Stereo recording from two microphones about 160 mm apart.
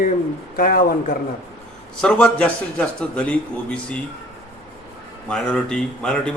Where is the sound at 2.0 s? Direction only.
5° left (ahead or behind).